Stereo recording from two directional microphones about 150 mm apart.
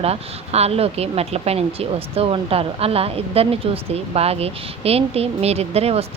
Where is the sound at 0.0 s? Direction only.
45° right (ahead or behind).